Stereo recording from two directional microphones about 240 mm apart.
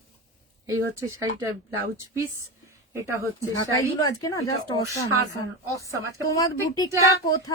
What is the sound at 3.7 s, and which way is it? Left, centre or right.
A woman's voice, centre.